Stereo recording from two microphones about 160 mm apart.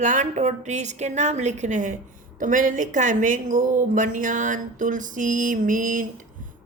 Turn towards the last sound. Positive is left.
turn(degrees=-60)  # may be behind; listen again after turning